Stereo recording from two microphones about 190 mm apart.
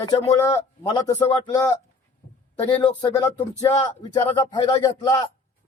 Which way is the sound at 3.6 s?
20° left (ahead or behind).